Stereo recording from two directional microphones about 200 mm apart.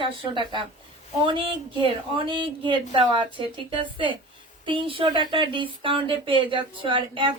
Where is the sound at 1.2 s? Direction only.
25° right (ahead or behind).